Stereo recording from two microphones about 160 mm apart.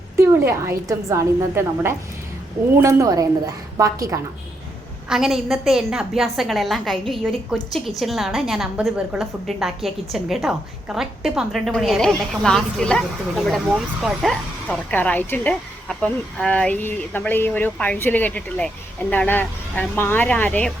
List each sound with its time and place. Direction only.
0.2 s a woman's voice: 15° right (ahead or behind)
5.0 s a woman's voice: centre (ahead or behind)